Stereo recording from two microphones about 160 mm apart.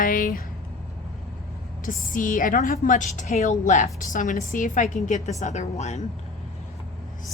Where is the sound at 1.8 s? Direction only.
55° left (ahead or behind).